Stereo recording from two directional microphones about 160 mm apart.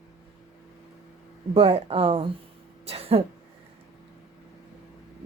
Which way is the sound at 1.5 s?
40° right (ahead or behind).